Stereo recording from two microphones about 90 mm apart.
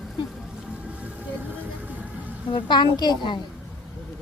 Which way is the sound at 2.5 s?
60° left (ahead or behind).